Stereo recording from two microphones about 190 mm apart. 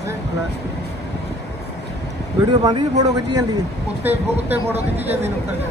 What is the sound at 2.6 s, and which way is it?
Speech, 20° right (ahead or behind).